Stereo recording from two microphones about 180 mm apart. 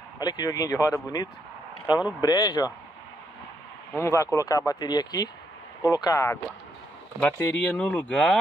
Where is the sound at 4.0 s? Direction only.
15° left (ahead or behind).